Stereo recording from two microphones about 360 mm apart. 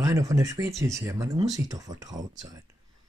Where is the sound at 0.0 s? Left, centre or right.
Centre.